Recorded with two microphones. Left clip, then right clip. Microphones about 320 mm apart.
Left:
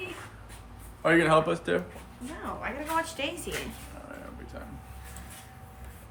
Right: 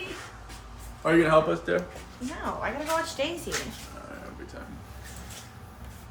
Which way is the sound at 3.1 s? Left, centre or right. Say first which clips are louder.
Right 3 dB; centre.